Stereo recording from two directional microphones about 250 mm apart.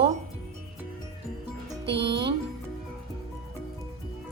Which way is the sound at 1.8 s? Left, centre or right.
Right.